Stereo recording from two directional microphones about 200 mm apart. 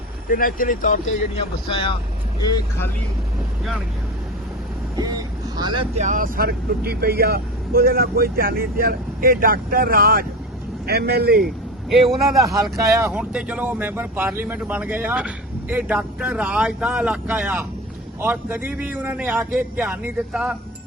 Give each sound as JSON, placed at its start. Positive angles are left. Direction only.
{"t": 0.3, "sound": "speech", "side_deg": 45}
{"t": 1.6, "sound": "speech", "side_deg": 25}
{"t": 4.9, "sound": "speech", "side_deg": -20}
{"t": 5.9, "sound": "speech", "side_deg": -35}
{"t": 12.7, "sound": "speech", "side_deg": -15}